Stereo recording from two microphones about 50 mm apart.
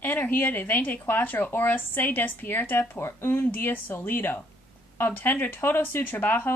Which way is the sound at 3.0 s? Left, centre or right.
Left.